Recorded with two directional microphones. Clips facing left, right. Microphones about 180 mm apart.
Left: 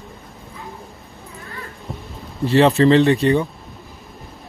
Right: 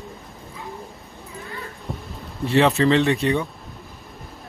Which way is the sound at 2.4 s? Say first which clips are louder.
Left 4 dB; centre (ahead or behind).